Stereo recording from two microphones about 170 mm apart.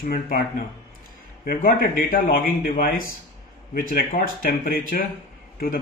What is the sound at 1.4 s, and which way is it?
A man's voice, 60° left (ahead or behind).